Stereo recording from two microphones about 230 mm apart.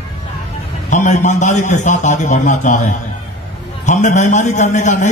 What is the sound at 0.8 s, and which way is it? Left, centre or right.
A man's voice, left.